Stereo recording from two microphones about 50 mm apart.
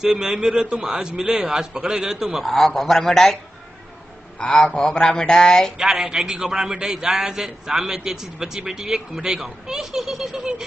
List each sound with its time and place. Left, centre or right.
0.0 s a man's voice: centre
2.4 s speech: centre
4.4 s a man's voice: left
5.8 s a man's voice: centre